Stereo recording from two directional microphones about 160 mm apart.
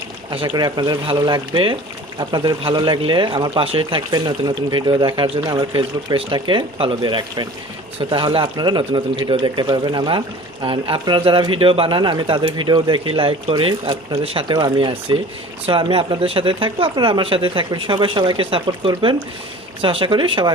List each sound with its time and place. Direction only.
0.3 s speech: 30° right (ahead or behind)